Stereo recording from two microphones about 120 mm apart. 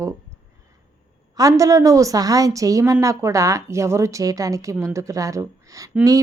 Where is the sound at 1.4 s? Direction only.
30° right (ahead or behind).